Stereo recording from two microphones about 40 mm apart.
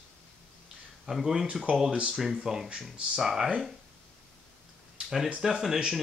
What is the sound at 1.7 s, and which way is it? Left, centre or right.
Speech, right.